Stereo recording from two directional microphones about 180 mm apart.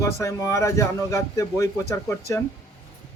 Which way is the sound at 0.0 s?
15° left (ahead or behind).